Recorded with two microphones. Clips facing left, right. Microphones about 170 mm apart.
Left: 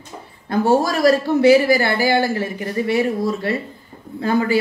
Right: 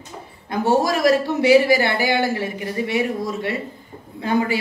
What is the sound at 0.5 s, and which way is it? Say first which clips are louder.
Speech: left 2 dB; 35° left (ahead or behind).